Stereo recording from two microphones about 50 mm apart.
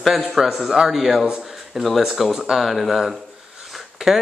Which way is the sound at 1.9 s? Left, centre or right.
Centre.